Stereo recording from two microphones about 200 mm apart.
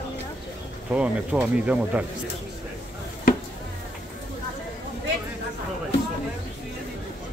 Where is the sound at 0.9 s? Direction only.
5° right (ahead or behind).